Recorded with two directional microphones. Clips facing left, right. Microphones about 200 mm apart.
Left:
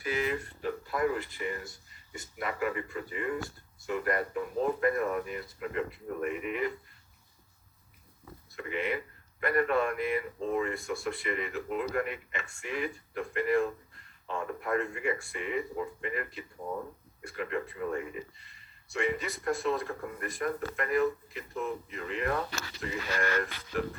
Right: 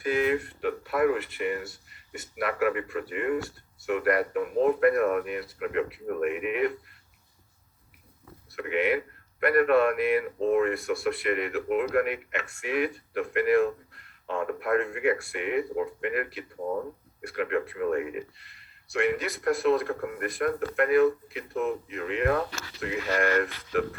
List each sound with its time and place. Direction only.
0.0 s speech: 55° right (ahead or behind)
8.4 s speech: 70° right (ahead or behind)